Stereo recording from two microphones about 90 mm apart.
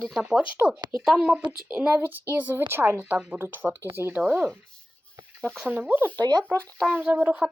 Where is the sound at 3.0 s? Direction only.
10° right (ahead or behind).